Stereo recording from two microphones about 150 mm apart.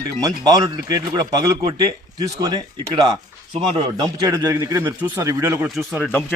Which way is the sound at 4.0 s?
25° right (ahead or behind).